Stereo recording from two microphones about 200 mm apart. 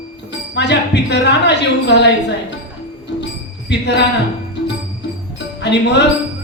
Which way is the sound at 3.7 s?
60° left (ahead or behind).